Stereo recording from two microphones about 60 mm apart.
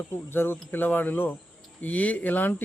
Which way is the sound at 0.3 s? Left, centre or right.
Left.